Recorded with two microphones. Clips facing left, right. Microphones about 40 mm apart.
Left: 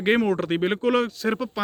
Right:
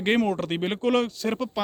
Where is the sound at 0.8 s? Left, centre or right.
Left.